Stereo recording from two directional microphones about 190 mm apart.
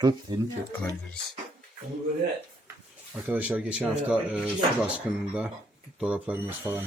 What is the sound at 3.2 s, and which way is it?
Speech, 5° right (ahead or behind).